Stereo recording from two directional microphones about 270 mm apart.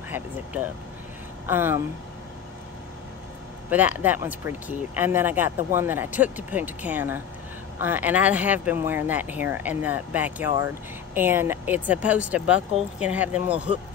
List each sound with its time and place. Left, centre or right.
1.5 s speech: centre
3.7 s speech: centre